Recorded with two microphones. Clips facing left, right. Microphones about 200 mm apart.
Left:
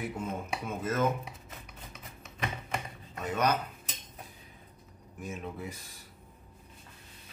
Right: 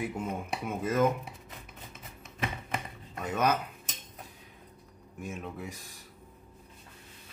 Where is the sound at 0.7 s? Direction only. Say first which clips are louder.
Right 3 dB; 15° right (ahead or behind).